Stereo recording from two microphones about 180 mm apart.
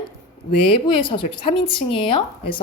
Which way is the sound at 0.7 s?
30° left (ahead or behind).